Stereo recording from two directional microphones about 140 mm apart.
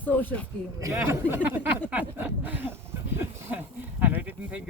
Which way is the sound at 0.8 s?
20° right (ahead or behind).